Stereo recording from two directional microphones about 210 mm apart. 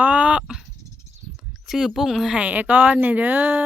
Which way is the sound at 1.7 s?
Centre (ahead or behind).